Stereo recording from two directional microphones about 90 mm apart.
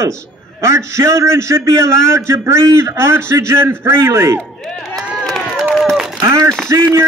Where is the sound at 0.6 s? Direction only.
30° right (ahead or behind).